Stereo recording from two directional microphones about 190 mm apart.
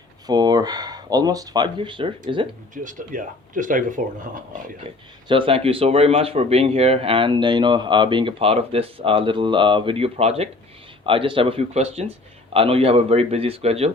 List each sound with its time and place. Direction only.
0.3 s speech: 20° right (ahead or behind)
2.7 s speech: 45° right (ahead or behind)
5.3 s speech: 30° right (ahead or behind)